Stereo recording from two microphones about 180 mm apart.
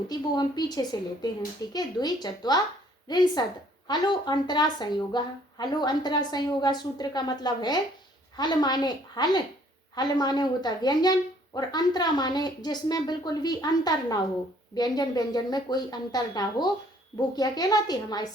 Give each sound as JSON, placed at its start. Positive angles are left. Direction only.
{"t": 0.1, "sound": "speech", "side_deg": 20}